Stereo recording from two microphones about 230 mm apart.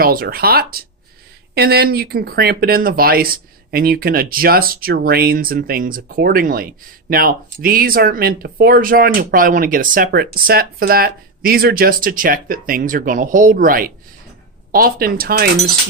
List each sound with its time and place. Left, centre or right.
0.0 s speech: right